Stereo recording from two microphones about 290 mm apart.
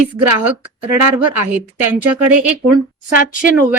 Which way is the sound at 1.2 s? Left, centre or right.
Centre.